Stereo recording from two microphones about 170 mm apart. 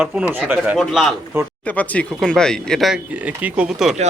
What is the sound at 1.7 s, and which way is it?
Speech, 10° left (ahead or behind).